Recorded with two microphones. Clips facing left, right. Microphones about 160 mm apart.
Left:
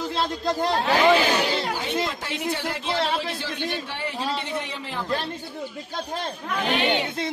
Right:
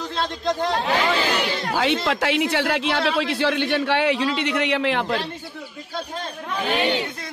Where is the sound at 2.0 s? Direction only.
80° right.